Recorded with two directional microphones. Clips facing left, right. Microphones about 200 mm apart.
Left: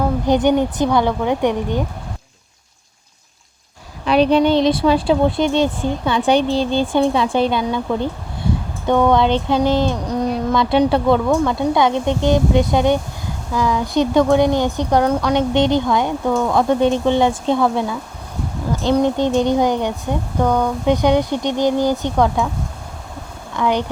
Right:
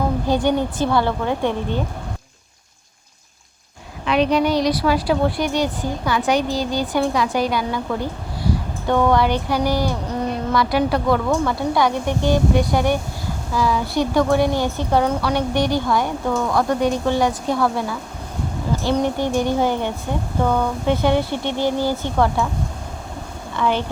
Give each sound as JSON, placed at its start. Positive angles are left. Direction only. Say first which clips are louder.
{"t": 0.3, "sound": "speech", "louder": "left 5 dB", "side_deg": 20}
{"t": 4.0, "sound": "a woman's voice", "louder": "left 4 dB", "side_deg": 35}
{"t": 23.6, "sound": "speech", "louder": "left 2 dB", "side_deg": 15}